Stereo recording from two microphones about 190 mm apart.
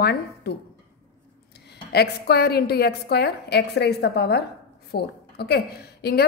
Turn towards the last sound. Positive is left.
turn(degrees=55)  # may be behind; listen again after turning